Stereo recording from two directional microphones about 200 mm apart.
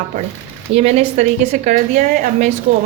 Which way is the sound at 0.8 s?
35° right (ahead or behind).